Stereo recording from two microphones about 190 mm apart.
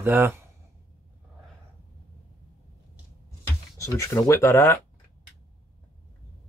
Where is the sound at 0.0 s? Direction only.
10° right (ahead or behind).